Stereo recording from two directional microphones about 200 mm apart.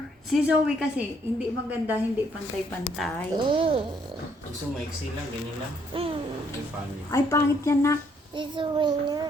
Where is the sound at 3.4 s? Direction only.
25° right (ahead or behind).